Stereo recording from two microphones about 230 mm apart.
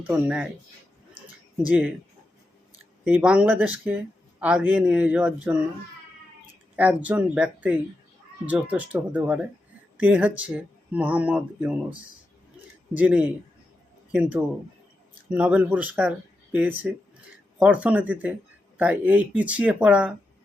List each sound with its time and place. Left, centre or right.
0.1 s a man's voice: centre
1.6 s speech: centre
3.0 s a man's voice: centre
6.7 s a man's voice: centre